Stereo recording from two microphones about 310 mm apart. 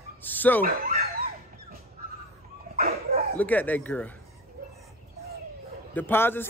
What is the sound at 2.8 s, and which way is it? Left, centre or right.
Dog, right.